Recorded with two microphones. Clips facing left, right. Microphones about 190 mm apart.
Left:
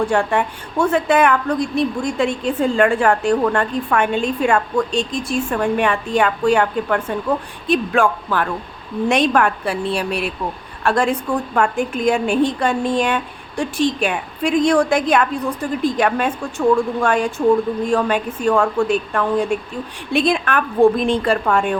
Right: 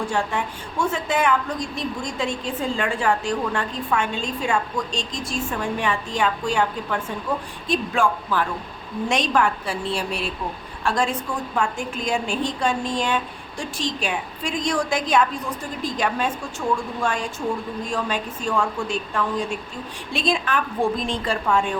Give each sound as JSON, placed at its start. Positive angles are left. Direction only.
{"t": 0.1, "sound": "a woman's voice", "side_deg": 60}